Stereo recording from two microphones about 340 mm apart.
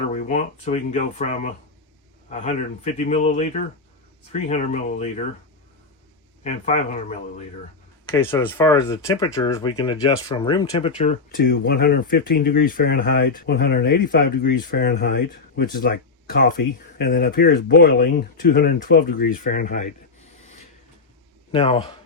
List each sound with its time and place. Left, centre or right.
0.1 s speech: left
6.4 s speech: centre
8.1 s speech: centre; by 19.9 s left
21.5 s speech: centre